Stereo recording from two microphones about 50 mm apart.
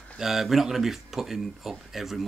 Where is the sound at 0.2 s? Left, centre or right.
Centre.